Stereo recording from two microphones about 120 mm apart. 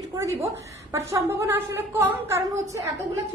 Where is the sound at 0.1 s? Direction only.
25° right (ahead or behind).